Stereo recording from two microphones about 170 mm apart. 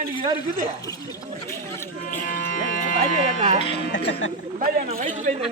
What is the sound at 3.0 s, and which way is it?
Speech, 45° right (ahead or behind).